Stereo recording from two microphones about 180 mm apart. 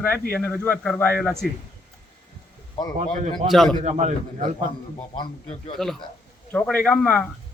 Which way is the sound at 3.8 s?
40° right (ahead or behind).